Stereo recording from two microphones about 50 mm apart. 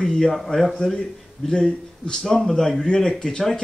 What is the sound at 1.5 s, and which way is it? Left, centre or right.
Speech, centre.